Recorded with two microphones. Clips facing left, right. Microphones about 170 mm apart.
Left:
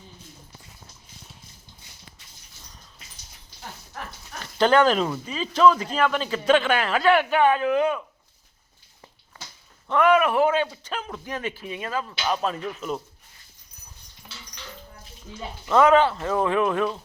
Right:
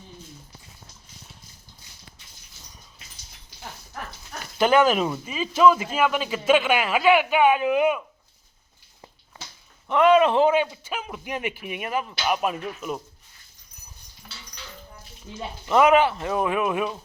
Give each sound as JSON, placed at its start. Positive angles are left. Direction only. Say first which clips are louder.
{"t": 4.5, "sound": "speech", "louder": "even", "side_deg": -10}
{"t": 9.9, "sound": "speech", "louder": "right 2 dB", "side_deg": -20}
{"t": 15.6, "sound": "speech", "louder": "even", "side_deg": -15}